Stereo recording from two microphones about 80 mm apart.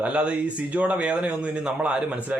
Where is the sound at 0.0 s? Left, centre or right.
Centre.